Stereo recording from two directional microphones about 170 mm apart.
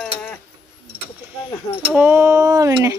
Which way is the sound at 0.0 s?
5° left (ahead or behind).